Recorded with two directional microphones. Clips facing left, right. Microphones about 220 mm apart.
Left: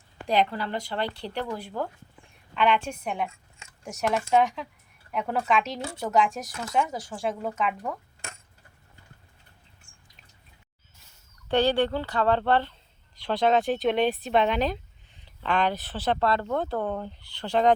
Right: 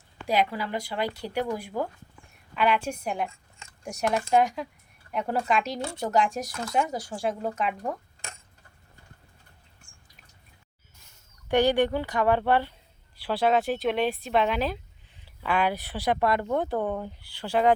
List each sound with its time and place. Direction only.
0.3 s speech: 10° right (ahead or behind)
11.4 s speech: 15° right (ahead or behind)